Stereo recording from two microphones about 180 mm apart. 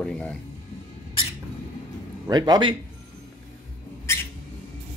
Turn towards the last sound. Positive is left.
turn(degrees=15)  # may be behind; listen again after turning